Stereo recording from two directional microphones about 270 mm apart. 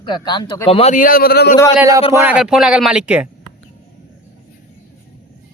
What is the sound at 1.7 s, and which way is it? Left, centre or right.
A man's voice, centre.